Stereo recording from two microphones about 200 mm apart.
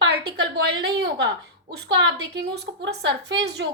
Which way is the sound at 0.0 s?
60° right (ahead or behind).